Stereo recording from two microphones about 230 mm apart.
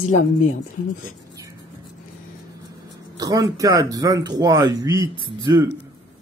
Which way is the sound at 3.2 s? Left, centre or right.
Centre.